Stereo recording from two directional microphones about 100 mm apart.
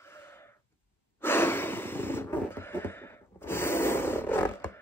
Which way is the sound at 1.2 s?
20° left (ahead or behind).